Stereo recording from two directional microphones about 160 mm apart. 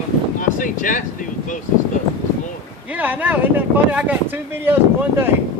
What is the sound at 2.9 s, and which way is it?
Speech, 10° right (ahead or behind).